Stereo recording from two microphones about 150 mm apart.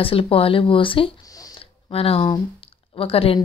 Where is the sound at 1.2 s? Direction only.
25° left (ahead or behind).